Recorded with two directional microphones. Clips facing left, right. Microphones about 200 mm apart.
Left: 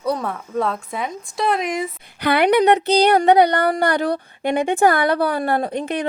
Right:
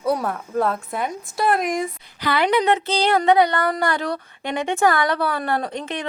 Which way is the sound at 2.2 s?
60° left (ahead or behind).